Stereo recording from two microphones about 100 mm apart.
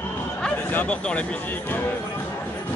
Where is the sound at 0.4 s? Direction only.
10° left (ahead or behind).